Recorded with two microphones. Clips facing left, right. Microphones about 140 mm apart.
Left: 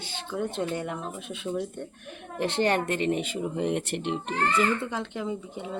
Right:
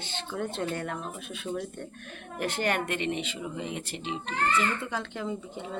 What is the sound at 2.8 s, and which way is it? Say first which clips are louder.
Speech: left 4 dB; 40° left (ahead or behind).